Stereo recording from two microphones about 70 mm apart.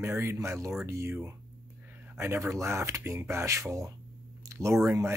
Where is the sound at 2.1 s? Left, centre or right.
Right.